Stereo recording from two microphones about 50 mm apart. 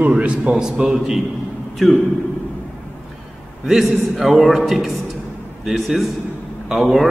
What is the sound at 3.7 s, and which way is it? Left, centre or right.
A man's voice, centre.